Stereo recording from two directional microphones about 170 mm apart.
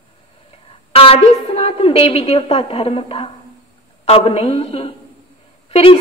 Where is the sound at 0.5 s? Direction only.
35° left (ahead or behind).